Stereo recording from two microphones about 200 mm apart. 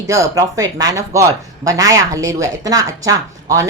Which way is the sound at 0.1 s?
15° right (ahead or behind).